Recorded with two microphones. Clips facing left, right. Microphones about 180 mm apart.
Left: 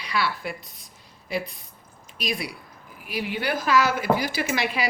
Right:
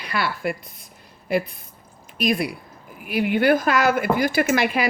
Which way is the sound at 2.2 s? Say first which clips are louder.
Right 8 dB; 55° right (ahead or behind).